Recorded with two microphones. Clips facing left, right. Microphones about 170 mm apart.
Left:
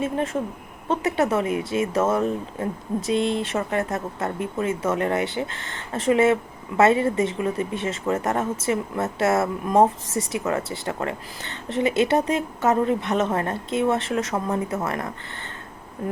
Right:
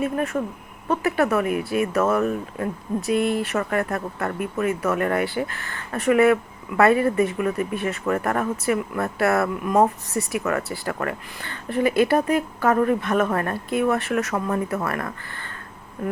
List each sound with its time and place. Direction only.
0.9 s speech: 25° left (ahead or behind)